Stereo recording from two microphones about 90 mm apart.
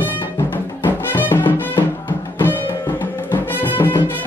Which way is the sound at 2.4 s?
20° left (ahead or behind).